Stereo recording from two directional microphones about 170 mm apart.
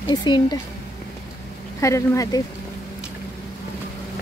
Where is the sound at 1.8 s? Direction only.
20° left (ahead or behind).